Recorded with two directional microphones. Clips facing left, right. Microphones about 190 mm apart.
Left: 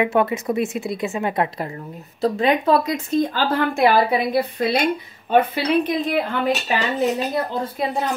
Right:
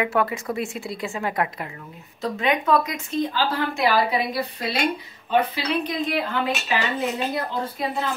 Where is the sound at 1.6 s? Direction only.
35° left (ahead or behind).